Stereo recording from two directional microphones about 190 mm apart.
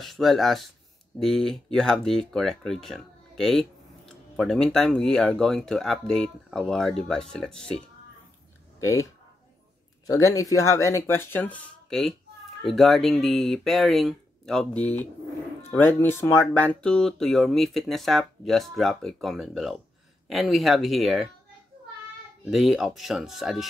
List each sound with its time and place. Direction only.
0.0 s speech: centre (ahead or behind)
8.7 s a sound: 15° left (ahead or behind)
10.0 s speech: 15° left (ahead or behind); by 21.3 s centre (ahead or behind)
22.4 s speech: centre (ahead or behind)